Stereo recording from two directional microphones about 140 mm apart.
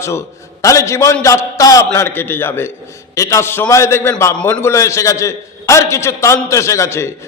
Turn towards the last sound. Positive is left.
turn(degrees=20)  # may be behind; listen again after turning